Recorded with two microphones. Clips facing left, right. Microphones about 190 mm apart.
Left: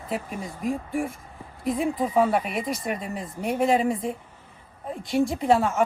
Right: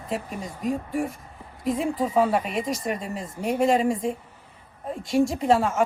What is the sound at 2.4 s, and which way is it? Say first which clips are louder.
Speech: right 1 dB; 30° right (ahead or behind).